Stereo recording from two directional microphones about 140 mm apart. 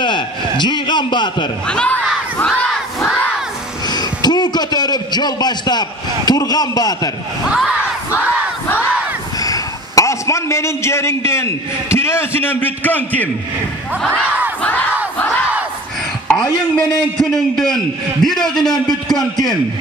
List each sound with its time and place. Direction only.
0.0 s a man's voice: 35° left (ahead or behind)
1.7 s speech: 10° left (ahead or behind)
2.3 s crowd: 5° left (ahead or behind)
3.8 s a man's voice: 30° left (ahead or behind)
7.4 s a man's voice: 5° right (ahead or behind)
8.6 s battle cry: 15° left (ahead or behind)
9.4 s a man's voice: 25° left (ahead or behind)
14.6 s speech: 10° left (ahead or behind)
16.7 s a man's voice: 5° left (ahead or behind)